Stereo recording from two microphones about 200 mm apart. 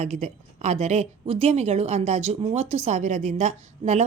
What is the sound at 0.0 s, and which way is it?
A woman's voice, 35° right (ahead or behind).